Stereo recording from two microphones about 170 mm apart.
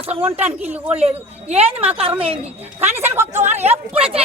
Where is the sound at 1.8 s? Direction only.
35° right (ahead or behind).